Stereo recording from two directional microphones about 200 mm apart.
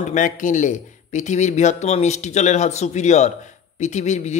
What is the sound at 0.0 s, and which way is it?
Speech, 40° left (ahead or behind).